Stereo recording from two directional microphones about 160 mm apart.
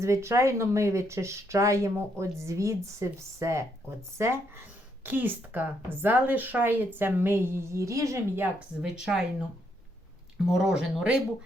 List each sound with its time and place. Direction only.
0.0 s a woman's voice: 20° right (ahead or behind)
8.5 s speech: 5° right (ahead or behind)
10.4 s speech: 5° right (ahead or behind)